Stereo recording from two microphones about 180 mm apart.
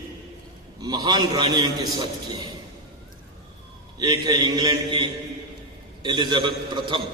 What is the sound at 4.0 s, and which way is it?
A man's voice, 20° right (ahead or behind).